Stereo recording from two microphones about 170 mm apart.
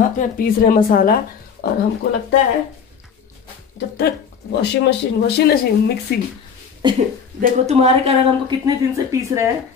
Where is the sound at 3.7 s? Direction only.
70° left (ahead or behind).